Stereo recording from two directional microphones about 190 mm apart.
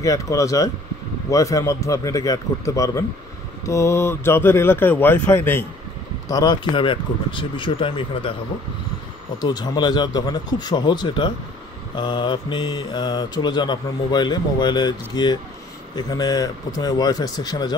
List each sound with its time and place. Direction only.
0.0 s speech: 15° left (ahead or behind)
6.2 s mantra: 20° left (ahead or behind)
9.4 s mantra: 20° left (ahead or behind)